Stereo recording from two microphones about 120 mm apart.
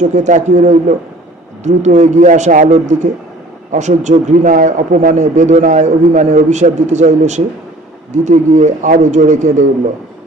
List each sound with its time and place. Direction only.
0.0 s a man's voice: 90° right